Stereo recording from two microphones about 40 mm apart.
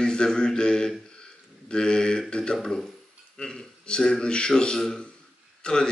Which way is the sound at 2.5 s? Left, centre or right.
Centre.